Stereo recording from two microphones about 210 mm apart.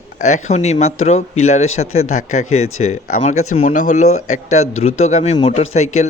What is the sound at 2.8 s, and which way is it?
A man's voice, 35° left (ahead or behind).